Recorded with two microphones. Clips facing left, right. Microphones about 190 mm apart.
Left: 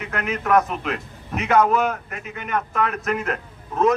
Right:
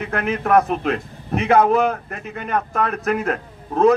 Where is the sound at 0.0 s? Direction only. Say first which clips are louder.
Right 4 dB; 35° right (ahead or behind).